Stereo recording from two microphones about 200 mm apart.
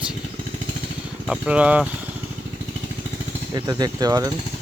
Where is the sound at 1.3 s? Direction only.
5° right (ahead or behind).